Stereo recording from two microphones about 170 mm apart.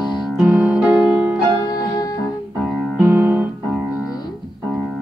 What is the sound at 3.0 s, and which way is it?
Music, 15° right (ahead or behind).